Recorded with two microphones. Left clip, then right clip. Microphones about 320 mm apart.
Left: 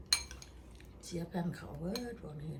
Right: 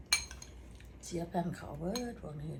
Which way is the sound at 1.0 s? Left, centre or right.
Centre.